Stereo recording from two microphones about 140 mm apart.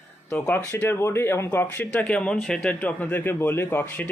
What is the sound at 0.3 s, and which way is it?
Speech, 10° left (ahead or behind).